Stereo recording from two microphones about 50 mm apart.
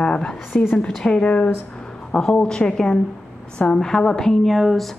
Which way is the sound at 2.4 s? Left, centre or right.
Centre.